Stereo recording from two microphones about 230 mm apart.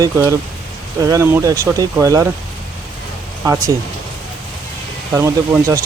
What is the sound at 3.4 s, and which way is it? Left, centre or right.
Speech, centre.